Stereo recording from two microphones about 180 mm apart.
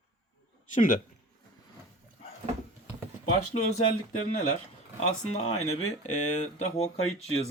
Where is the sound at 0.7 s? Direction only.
50° left (ahead or behind).